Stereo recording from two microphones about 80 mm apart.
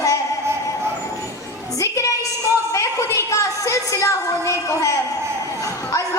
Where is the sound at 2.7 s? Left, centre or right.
Left.